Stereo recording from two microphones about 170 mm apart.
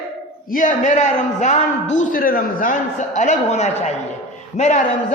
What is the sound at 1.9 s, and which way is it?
A man's voice, 55° left (ahead or behind).